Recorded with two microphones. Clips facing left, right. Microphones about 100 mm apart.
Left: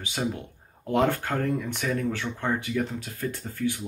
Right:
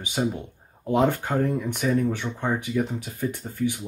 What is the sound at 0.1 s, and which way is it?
Speech, 10° right (ahead or behind).